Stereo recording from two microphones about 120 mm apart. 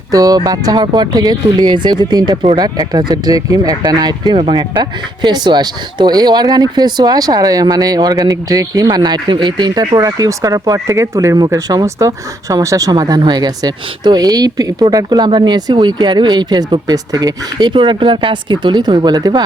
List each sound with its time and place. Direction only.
0.1 s speech: 30° right (ahead or behind)